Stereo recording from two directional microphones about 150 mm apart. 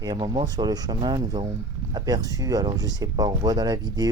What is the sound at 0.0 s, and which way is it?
Speech, 25° right (ahead or behind).